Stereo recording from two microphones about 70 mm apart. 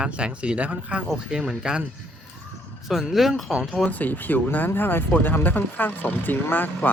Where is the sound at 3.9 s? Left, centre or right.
Left.